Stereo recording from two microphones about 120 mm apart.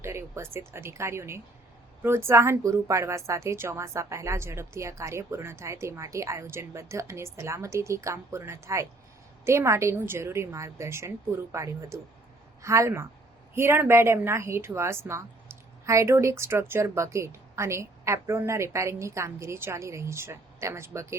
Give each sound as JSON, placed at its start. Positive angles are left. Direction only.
{"t": 0.0, "sound": "speech", "side_deg": -25}